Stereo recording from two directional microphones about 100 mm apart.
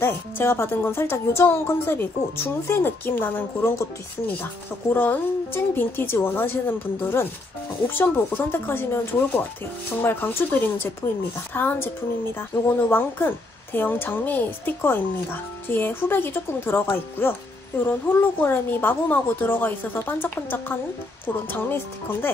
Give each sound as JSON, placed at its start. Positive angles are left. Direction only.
{"t": 0.0, "sound": "a woman's voice", "side_deg": 25}
{"t": 4.9, "sound": "a woman's voice", "side_deg": 20}